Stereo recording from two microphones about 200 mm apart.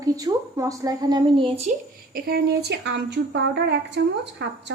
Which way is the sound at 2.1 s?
50° right (ahead or behind).